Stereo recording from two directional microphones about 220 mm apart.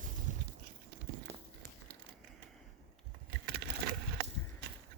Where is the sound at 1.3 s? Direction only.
10° right (ahead or behind).